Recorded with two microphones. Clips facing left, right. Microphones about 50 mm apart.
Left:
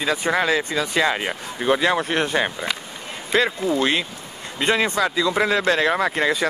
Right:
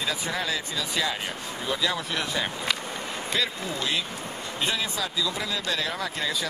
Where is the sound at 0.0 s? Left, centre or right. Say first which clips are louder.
Left 8 dB; left.